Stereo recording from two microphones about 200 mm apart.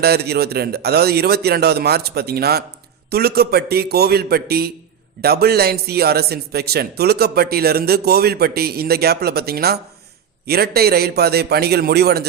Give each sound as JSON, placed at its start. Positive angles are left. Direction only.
{"t": 0.0, "sound": "a man's voice", "side_deg": -55}